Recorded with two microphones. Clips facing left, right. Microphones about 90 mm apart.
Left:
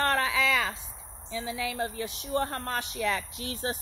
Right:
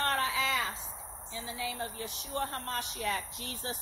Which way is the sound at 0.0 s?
75° left (ahead or behind).